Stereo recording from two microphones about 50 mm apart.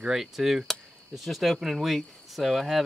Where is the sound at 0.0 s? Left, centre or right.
Centre.